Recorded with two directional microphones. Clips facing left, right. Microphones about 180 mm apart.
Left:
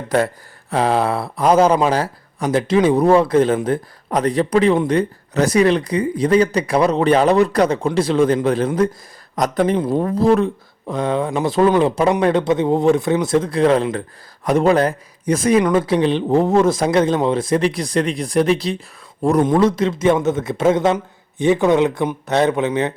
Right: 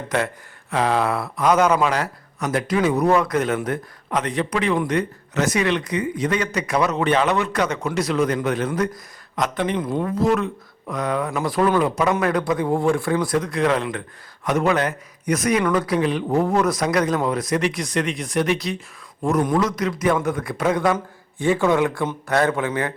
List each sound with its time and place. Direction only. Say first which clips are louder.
0.7 s speech: left 3 dB; 30° left (ahead or behind)